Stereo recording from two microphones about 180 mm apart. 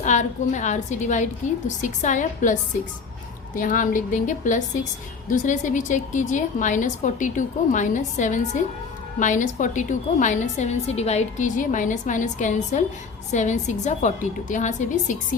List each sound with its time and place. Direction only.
0.0 s a woman's voice: 40° left (ahead or behind)